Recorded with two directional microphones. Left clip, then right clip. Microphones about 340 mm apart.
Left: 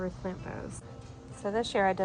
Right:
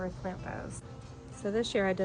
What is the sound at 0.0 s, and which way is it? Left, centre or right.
A woman's voice, centre.